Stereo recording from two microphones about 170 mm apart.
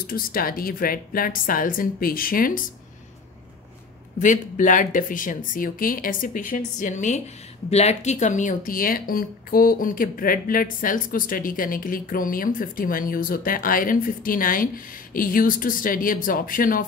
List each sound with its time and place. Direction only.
0.0 s speech: 60° left (ahead or behind)
4.2 s speech: 50° left (ahead or behind)